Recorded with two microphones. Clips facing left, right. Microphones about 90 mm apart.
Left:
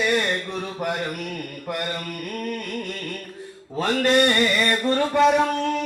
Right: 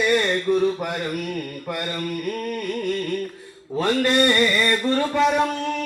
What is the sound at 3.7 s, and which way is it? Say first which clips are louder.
Carnatic music: even; 20° left (ahead or behind).